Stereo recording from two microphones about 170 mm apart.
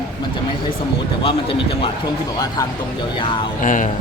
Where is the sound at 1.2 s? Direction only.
30° left (ahead or behind).